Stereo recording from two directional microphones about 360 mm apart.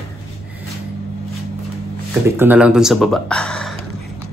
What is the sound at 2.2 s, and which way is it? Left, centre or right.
Speech, centre.